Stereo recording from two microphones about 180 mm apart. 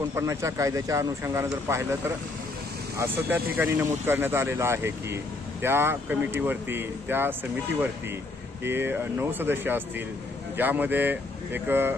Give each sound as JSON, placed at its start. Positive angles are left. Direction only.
{"t": 0.2, "sound": "speech", "side_deg": -15}
{"t": 8.6, "sound": "speech", "side_deg": -10}